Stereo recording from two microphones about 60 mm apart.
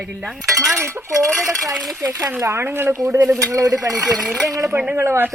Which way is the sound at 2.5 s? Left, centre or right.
Right.